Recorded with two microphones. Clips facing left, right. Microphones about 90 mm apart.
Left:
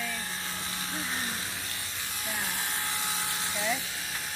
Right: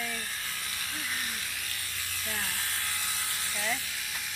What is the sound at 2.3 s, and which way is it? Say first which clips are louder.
Electric toothbrush: left 2 dB; 20° left (ahead or behind).